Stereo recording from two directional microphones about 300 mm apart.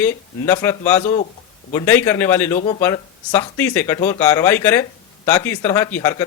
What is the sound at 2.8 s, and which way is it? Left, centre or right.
A man's voice, centre.